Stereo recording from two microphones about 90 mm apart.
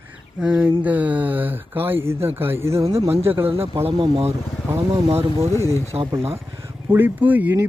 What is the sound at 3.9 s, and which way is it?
Speech, 90° right.